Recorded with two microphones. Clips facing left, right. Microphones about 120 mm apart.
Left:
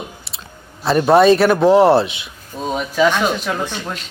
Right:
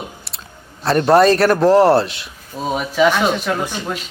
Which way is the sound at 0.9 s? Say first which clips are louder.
Left 1 dB; centre (ahead or behind).